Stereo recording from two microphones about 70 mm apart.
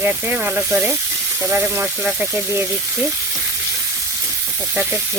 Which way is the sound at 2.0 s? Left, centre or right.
Centre.